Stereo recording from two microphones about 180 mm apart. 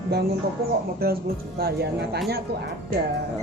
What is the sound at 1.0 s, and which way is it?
Speech, 60° right (ahead or behind).